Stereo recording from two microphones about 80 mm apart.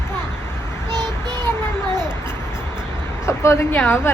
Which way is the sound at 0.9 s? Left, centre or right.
Right.